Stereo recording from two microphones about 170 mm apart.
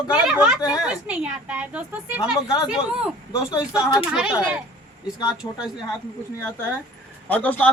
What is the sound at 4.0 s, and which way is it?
Speech, 5° right (ahead or behind).